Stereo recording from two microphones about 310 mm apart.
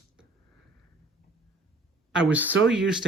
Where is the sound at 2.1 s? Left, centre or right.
Centre.